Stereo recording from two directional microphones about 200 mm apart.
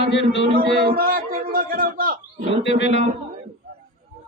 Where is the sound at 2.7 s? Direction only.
60° left (ahead or behind).